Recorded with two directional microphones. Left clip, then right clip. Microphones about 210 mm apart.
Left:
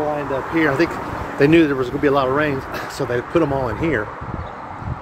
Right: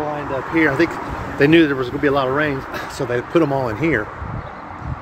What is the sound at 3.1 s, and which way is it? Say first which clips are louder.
Speech: right 1 dB; 25° right (ahead or behind).